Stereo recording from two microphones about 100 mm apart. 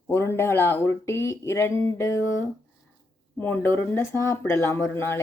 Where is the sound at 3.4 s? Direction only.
20° left (ahead or behind).